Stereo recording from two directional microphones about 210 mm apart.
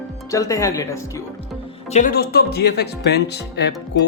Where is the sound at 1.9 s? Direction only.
40° left (ahead or behind).